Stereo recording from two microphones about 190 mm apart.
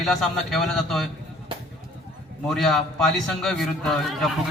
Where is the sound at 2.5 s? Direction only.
Centre (ahead or behind).